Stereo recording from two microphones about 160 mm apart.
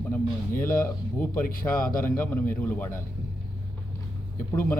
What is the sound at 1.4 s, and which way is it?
Speech, 60° left (ahead or behind).